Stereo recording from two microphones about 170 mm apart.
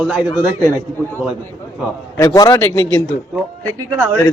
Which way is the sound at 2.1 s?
20° left (ahead or behind).